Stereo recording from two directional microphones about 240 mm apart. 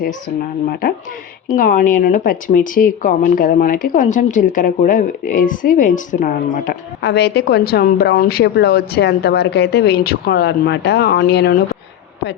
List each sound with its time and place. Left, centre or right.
0.7 s speech: left